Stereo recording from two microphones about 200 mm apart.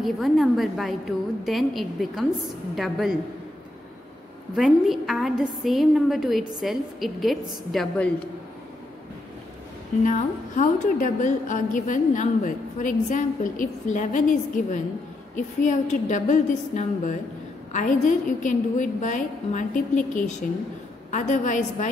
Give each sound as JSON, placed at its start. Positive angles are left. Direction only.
{"t": 0.0, "sound": "a woman's voice", "side_deg": 0}
{"t": 4.6, "sound": "a woman's voice", "side_deg": 0}
{"t": 10.0, "sound": "a woman's voice", "side_deg": 40}